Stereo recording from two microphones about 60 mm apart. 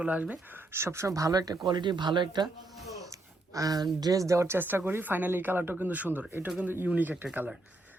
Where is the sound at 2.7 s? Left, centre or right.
Centre.